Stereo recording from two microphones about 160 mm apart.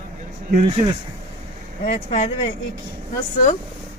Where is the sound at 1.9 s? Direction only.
40° left (ahead or behind).